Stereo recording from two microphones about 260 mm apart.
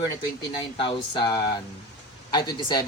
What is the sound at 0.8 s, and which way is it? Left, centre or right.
Speech, centre.